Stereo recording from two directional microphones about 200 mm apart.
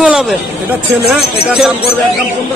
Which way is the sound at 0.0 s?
5° right (ahead or behind).